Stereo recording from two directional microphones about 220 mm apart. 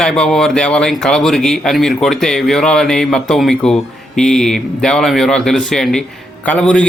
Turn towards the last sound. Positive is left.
turn(degrees=5)  # may be behind; listen again after turning